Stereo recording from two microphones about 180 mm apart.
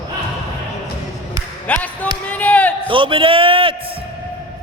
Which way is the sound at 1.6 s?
10° left (ahead or behind).